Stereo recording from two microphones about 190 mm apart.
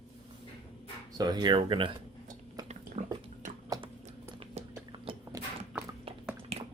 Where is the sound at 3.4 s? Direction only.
45° right (ahead or behind).